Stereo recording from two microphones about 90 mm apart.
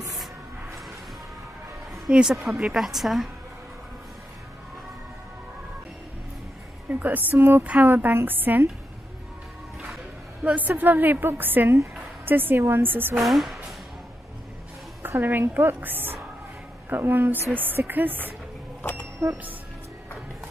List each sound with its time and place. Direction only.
2.0 s a woman's voice: 10° right (ahead or behind)
6.9 s a woman's voice: 20° right (ahead or behind)
10.4 s a woman's voice: 15° right (ahead or behind)
13.1 s speech: centre (ahead or behind)
15.0 s a woman's voice: 20° right (ahead or behind)
18.8 s a sound: 20° left (ahead or behind)